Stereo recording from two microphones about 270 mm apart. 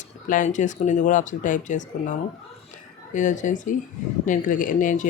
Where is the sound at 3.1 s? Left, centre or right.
Left.